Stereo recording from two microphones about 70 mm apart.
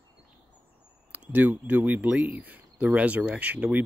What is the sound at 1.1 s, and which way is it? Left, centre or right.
Speech, right.